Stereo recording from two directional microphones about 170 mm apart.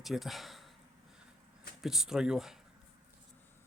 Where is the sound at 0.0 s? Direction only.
Centre (ahead or behind).